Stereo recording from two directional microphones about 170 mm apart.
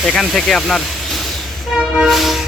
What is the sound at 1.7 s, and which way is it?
Train, 5° right (ahead or behind).